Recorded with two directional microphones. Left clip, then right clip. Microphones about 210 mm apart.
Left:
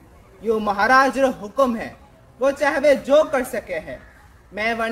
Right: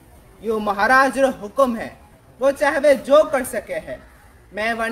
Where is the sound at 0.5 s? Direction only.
10° right (ahead or behind).